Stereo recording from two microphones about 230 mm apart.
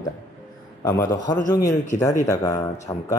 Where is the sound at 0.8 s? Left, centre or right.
Centre.